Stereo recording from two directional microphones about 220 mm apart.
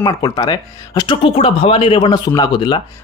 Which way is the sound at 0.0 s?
20° left (ahead or behind).